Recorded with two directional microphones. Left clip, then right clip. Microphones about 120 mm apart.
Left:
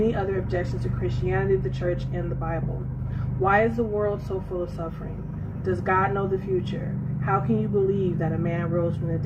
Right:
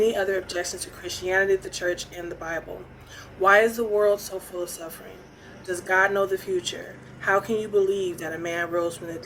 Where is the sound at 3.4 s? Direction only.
40° right (ahead or behind).